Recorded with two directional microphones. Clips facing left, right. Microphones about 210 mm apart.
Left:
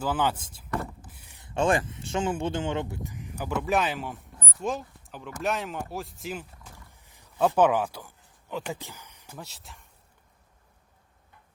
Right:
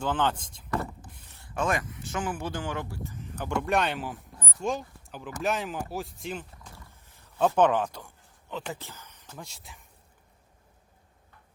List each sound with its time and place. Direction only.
0.0 s speech: 10° left (ahead or behind)
6.7 s wild animals: 15° left (ahead or behind)
7.3 s speech: 5° left (ahead or behind)